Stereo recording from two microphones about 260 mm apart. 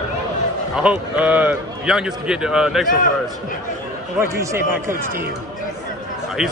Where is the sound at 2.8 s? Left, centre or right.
Left.